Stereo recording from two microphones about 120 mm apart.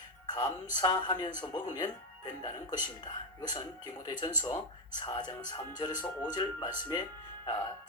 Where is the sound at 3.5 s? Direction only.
35° left (ahead or behind).